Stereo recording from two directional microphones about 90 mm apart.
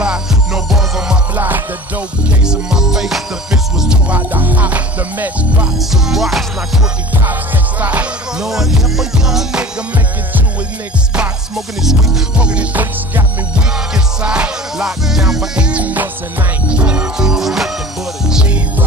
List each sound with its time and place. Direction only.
0.0 s music: 5° right (ahead or behind)
1.3 s music: 20° right (ahead or behind)
4.3 s music: 20° right (ahead or behind)
5.9 s music: 5° right (ahead or behind)
7.8 s music: 15° right (ahead or behind)
11.1 s music: 5° right (ahead or behind)